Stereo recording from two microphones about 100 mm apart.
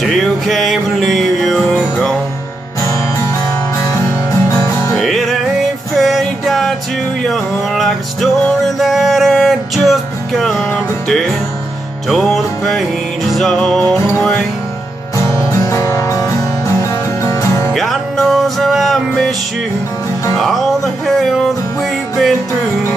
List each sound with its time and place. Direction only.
0.0 s music: 5° left (ahead or behind)
2.8 s music: 30° left (ahead or behind)
4.9 s music: centre (ahead or behind)
15.1 s music: 30° left (ahead or behind)
17.7 s music: 5° left (ahead or behind)
20.3 s music: 5° left (ahead or behind)